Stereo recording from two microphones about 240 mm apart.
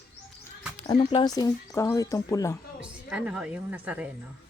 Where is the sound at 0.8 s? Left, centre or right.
Left.